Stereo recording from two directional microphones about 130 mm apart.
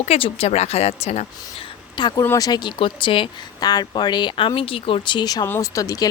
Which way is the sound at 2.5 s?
35° left (ahead or behind).